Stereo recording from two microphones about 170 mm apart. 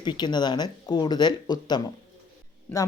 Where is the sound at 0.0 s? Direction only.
25° left (ahead or behind).